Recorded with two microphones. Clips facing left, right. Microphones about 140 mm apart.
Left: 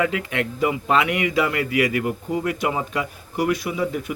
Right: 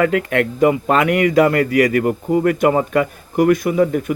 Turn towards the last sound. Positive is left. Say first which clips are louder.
# right 8 dB
turn(degrees=-50)  # may be behind; listen again after turning